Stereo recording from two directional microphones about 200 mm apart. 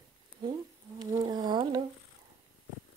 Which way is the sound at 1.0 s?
20° right (ahead or behind).